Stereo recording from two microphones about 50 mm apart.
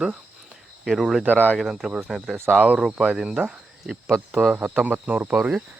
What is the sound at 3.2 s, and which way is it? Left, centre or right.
Speech, centre.